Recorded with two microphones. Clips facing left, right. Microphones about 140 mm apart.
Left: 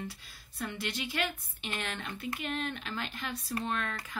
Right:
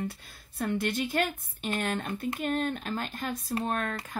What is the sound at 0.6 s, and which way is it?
A woman's voice, 50° right (ahead or behind).